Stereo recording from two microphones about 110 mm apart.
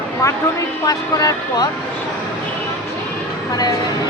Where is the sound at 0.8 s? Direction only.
35° left (ahead or behind).